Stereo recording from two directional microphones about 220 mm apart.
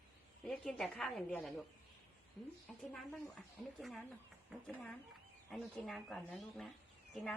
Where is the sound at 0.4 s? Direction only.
Centre (ahead or behind).